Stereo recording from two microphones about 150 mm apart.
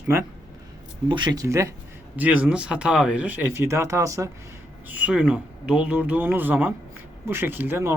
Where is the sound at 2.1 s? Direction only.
10° right (ahead or behind).